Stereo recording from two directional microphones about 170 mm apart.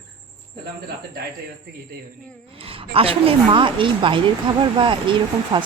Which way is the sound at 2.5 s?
35° right (ahead or behind).